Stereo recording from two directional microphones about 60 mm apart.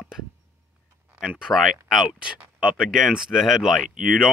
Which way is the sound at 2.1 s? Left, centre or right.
Centre.